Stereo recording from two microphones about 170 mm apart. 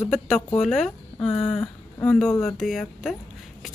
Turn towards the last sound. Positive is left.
turn(degrees=0)  # may be behind; listen again after turning